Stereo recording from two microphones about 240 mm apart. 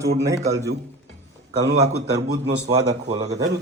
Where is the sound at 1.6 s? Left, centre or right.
Right.